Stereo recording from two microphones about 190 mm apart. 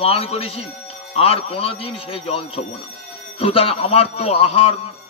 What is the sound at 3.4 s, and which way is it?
Jingle bell, 30° left (ahead or behind).